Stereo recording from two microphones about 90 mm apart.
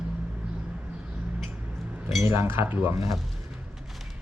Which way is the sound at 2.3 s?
25° right (ahead or behind).